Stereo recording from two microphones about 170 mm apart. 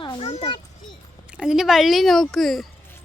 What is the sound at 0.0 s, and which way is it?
Children playing, 30° left (ahead or behind).